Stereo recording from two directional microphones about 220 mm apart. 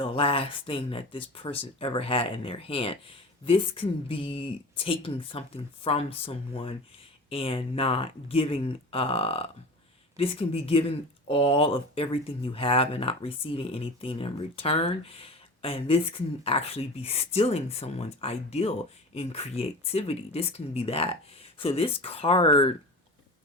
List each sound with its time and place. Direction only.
0.0 s speech: 25° left (ahead or behind)